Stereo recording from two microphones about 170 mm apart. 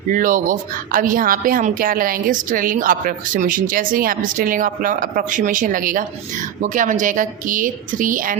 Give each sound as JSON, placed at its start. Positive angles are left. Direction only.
{"t": 0.1, "sound": "a woman's voice", "side_deg": -50}